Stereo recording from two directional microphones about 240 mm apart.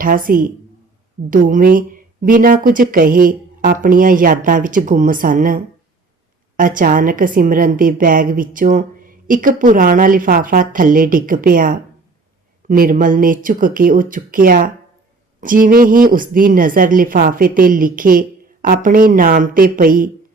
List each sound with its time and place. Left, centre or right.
0.0 s a woman's voice: right